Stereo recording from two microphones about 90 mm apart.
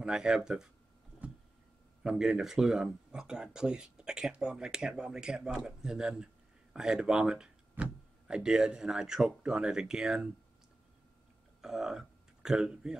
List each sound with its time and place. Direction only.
0.0 s speech: 10° right (ahead or behind)
1.2 s a sound: 15° right (ahead or behind)
2.0 s speech: 5° right (ahead or behind)
11.6 s speech: 5° right (ahead or behind)